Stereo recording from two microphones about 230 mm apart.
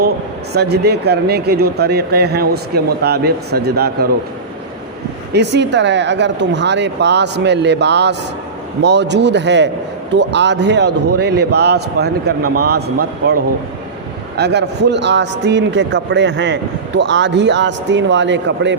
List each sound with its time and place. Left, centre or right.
0.5 s a man's voice: right
5.3 s a man's voice: right